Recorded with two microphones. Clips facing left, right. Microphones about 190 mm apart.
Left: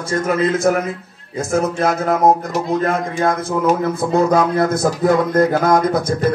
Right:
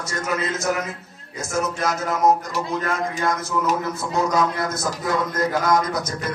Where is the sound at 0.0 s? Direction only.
55° left (ahead or behind).